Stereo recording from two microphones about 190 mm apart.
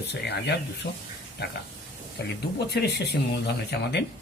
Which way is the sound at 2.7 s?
60° left (ahead or behind).